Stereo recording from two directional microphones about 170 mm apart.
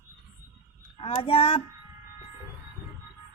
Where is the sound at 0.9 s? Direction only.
35° left (ahead or behind).